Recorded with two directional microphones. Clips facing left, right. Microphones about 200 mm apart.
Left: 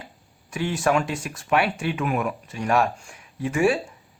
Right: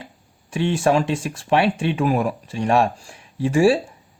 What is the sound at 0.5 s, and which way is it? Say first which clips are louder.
Speech: right 4 dB; 30° right (ahead or behind).